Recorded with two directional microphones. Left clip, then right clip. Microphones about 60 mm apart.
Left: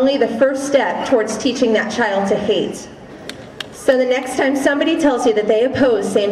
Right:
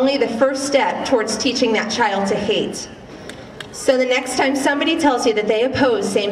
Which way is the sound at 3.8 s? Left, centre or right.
Centre.